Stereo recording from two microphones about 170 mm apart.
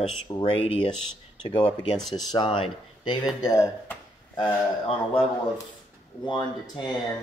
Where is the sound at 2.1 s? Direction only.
25° left (ahead or behind).